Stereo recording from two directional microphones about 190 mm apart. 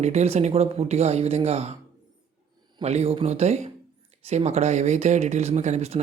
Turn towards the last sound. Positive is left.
turn(degrees=-35)  # may be behind; listen again after turning